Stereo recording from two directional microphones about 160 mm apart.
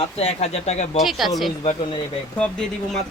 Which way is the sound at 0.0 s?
40° left (ahead or behind).